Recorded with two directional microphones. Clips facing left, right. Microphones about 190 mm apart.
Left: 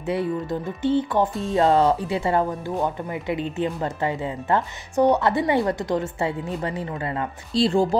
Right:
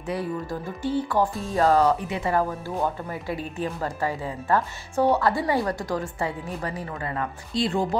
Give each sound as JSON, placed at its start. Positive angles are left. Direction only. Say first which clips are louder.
{"t": 0.0, "sound": "speech", "louder": "left 4 dB", "side_deg": 25}